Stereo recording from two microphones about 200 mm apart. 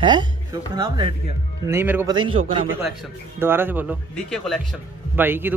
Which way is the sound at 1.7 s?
10° right (ahead or behind).